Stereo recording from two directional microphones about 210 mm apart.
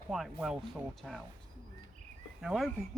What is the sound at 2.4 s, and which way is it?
Speech, centre (ahead or behind).